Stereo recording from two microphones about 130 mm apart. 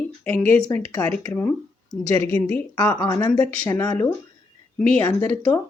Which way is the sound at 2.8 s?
30° left (ahead or behind).